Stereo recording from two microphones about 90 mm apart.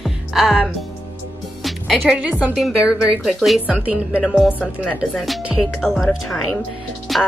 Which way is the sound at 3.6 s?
15° right (ahead or behind).